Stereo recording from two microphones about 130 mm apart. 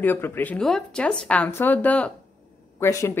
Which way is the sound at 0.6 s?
Centre (ahead or behind).